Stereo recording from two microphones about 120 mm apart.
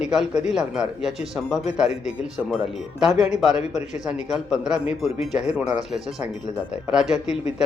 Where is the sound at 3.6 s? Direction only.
80° left.